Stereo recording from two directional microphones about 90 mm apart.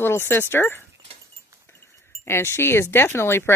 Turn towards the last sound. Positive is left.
turn(degrees=25)  # may be behind; listen again after turning